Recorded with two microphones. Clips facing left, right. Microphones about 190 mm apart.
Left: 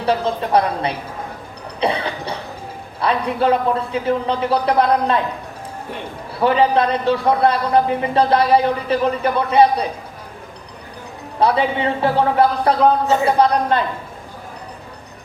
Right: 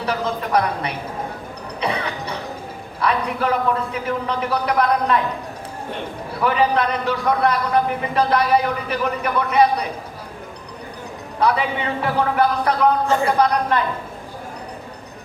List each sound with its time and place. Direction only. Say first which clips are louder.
0.0 s speech: left 4 dB; 30° left (ahead or behind)
1.8 s cough: left 4 dB; 30° left (ahead or behind)
3.0 s speech: left 3 dB; 30° left (ahead or behind)
6.4 s speech: left 3 dB; 30° left (ahead or behind)
11.3 s speech: left 3 dB; 30° left (ahead or behind)